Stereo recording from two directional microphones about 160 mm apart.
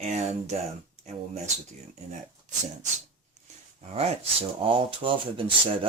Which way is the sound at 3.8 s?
40° right (ahead or behind).